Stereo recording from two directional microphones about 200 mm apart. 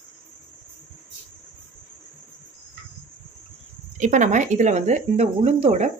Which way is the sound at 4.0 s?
40° right (ahead or behind).